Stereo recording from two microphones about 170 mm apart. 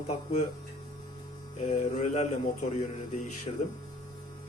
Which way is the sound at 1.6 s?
45° left (ahead or behind).